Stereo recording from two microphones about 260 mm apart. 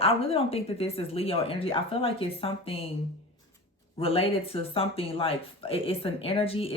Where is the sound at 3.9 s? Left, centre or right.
Left.